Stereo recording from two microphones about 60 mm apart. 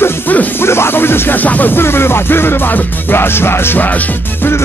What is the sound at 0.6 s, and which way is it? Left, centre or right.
Music, left.